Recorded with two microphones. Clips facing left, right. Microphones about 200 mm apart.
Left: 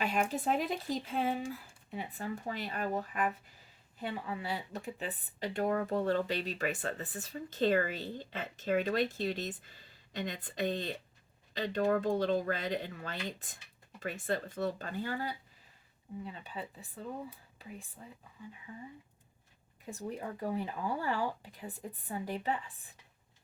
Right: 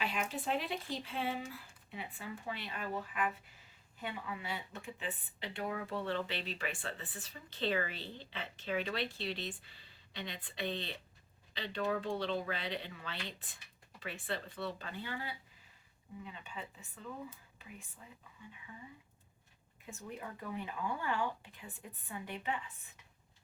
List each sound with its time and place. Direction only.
0.0 s speech: 45° left (ahead or behind)
19.8 s speech: 35° left (ahead or behind)